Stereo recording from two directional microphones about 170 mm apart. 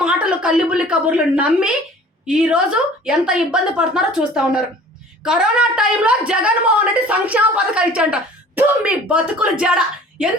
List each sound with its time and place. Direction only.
0.0 s a woman's voice: 5° right (ahead or behind)